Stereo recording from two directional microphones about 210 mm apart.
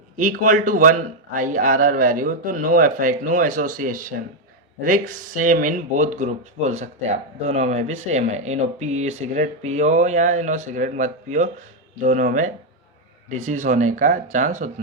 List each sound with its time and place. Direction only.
0.2 s a man's voice: 40° right (ahead or behind)